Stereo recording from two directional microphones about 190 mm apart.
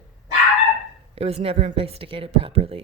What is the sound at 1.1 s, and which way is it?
A woman's voice, 35° right (ahead or behind).